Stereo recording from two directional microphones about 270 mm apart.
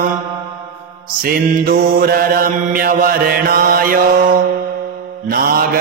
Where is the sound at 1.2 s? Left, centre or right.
Right.